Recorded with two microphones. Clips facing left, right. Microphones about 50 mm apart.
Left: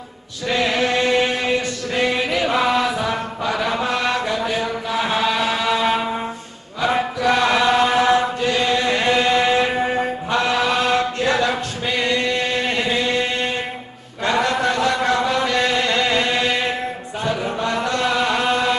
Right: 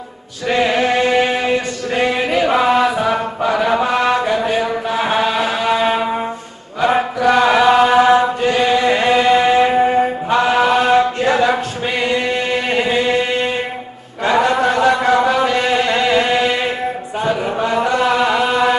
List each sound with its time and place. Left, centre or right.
0.5 s chant: centre
3.5 s mantra: centre
4.3 s mantra: right
5.0 s chant: right
5.3 s a sound: centre
6.8 s chant: centre
17.2 s a sound: centre
17.7 s music: centre